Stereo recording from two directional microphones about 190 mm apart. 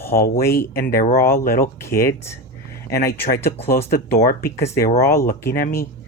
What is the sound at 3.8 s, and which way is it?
Speech, 55° left (ahead or behind).